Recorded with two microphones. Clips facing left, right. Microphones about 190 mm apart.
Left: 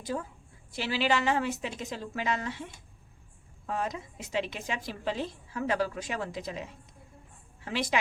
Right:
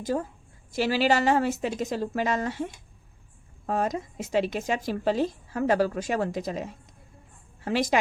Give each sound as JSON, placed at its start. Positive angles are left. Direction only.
{"t": 0.0, "sound": "speech", "side_deg": -45}